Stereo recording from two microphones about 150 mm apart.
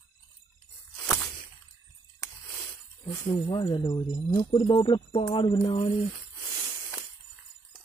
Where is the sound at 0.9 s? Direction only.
5° left (ahead or behind).